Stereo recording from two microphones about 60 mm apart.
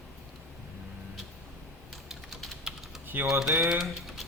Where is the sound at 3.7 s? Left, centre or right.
Centre.